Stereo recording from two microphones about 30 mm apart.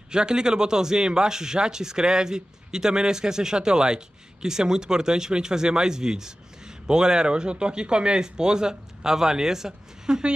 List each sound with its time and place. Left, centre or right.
0.1 s speech: right